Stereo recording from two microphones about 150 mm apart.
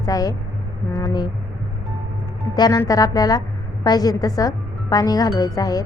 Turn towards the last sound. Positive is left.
turn(degrees=25)  # may be behind; listen again after turning